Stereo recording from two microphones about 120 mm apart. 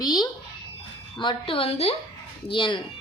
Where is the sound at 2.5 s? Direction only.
45° left (ahead or behind).